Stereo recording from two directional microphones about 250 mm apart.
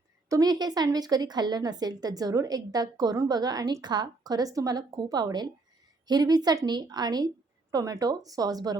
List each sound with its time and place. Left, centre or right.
0.3 s a woman's voice: centre